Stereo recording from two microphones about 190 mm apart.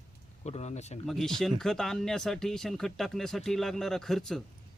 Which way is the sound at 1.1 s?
Centre (ahead or behind).